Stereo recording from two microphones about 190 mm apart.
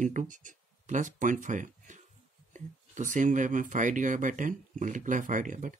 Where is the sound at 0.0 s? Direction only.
40° right (ahead or behind).